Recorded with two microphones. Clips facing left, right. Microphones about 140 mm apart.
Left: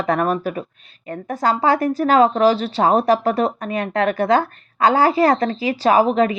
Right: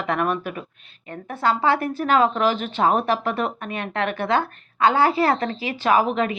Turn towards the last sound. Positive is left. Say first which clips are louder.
# left 5 dB
turn(degrees=35)  # may be behind; listen again after turning